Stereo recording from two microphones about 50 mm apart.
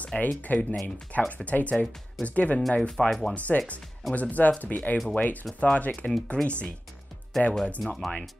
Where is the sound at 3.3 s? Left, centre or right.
Left.